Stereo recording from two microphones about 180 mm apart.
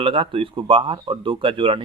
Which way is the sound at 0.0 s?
30° right (ahead or behind).